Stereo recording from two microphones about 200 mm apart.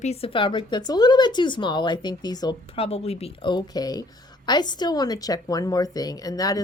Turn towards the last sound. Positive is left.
turn(degrees=20)  # may be behind; listen again after turning